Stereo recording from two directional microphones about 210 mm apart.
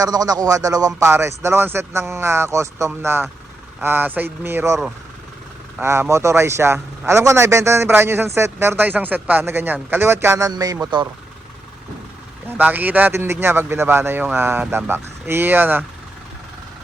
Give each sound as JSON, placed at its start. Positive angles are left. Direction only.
{"t": 0.0, "sound": "a man's voice", "side_deg": -15}
{"t": 5.8, "sound": "a man's voice", "side_deg": -10}
{"t": 12.5, "sound": "a man's voice", "side_deg": -10}